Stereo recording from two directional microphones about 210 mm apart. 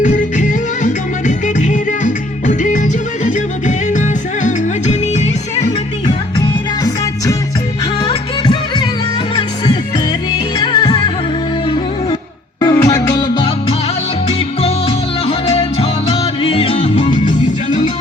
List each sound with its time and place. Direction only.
0.0 s music: 35° left (ahead or behind)
6.8 s music: 15° left (ahead or behind)
10.6 s music: 20° left (ahead or behind)
12.5 s music: 15° left (ahead or behind)